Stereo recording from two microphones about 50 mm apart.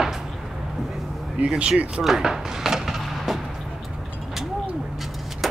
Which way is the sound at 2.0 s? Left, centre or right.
Centre.